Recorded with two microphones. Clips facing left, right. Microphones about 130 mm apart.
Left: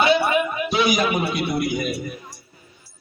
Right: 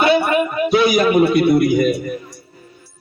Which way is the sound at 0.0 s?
50° right (ahead or behind).